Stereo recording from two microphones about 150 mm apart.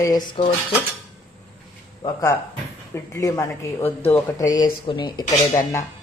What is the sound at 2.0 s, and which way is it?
Speech, 20° left (ahead or behind).